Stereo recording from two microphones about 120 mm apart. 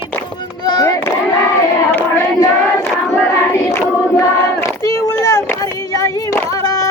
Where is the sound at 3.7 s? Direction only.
20° left (ahead or behind).